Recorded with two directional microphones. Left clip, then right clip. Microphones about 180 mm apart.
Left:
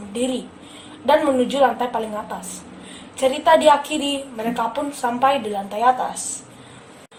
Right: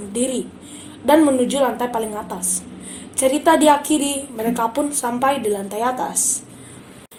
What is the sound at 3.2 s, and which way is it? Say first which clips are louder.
Speech: even; 35° right (ahead or behind).